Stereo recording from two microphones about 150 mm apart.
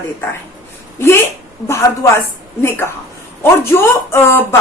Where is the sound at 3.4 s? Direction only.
15° left (ahead or behind).